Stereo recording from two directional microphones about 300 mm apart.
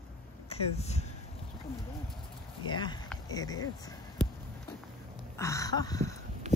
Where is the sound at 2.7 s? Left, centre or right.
Centre.